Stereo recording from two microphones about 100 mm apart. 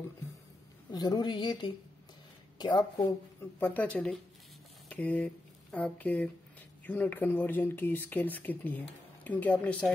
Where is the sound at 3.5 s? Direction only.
15° left (ahead or behind).